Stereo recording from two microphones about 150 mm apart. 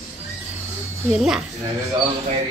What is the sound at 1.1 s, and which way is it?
Speech, 5° right (ahead or behind).